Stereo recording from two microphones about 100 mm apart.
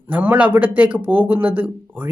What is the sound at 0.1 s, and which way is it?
A man's voice, 15° right (ahead or behind).